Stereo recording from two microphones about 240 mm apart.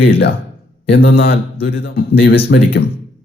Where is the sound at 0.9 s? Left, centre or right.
Left.